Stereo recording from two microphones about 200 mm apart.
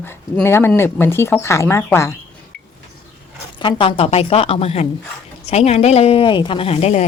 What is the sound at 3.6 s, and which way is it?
A woman's voice, 25° left (ahead or behind).